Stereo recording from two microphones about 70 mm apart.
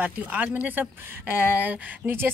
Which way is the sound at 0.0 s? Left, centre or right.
Right.